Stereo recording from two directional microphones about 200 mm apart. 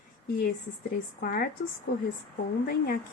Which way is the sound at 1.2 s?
45° left (ahead or behind).